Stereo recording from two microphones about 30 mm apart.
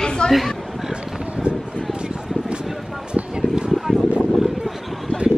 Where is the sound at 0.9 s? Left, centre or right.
Right.